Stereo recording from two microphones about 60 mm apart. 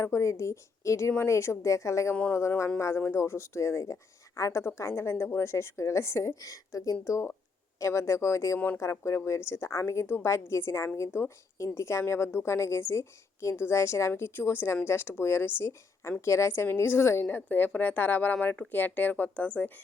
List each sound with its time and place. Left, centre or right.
0.0 s a woman's voice: left
2.7 s a woman's voice: left
7.0 s a woman's voice: left
8.5 s speech: left
8.8 s speech: left
17.2 s speech: left